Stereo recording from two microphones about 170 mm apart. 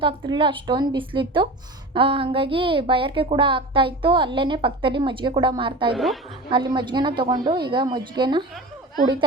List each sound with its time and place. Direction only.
0.0 s a woman's voice: 30° right (ahead or behind)
5.9 s a woman's voice: centre (ahead or behind)
6.5 s a woman's voice: 25° right (ahead or behind)